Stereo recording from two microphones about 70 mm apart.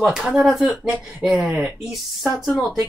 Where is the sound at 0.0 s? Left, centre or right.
Centre.